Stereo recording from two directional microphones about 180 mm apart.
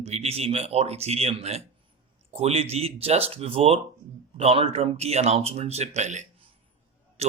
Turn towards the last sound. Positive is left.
turn(degrees=-35)  # may be behind; listen again after turning